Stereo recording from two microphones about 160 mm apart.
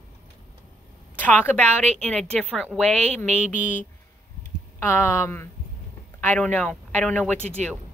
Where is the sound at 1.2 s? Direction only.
10° left (ahead or behind).